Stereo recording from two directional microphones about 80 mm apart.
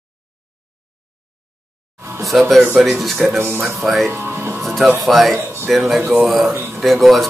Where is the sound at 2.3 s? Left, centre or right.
Centre.